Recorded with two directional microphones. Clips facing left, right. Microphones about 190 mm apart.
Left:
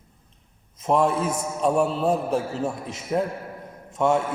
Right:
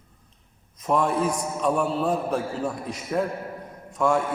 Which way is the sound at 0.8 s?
25° left (ahead or behind).